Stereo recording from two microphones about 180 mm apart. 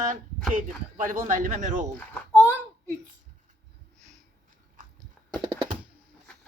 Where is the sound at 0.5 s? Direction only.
50° right (ahead or behind).